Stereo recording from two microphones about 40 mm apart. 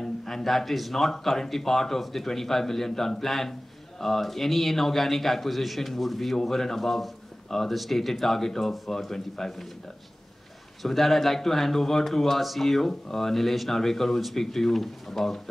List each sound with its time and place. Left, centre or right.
0.0 s a man's voice: centre
10.8 s speech: centre